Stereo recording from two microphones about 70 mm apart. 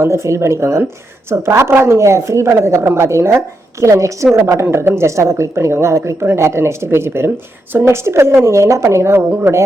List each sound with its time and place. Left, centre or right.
0.0 s a woman's voice: right
4.7 s a woman's voice: right